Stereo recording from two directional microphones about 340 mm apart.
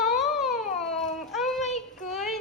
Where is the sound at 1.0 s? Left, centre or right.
Centre.